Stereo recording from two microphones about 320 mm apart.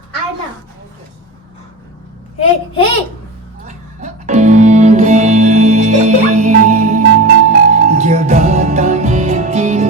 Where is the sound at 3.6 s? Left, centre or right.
Right.